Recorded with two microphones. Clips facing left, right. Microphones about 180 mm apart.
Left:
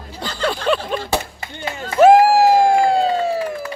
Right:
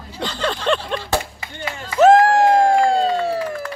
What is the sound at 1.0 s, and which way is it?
Speech, 50° left (ahead or behind).